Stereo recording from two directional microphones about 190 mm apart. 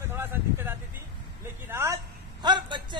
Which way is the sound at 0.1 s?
10° right (ahead or behind).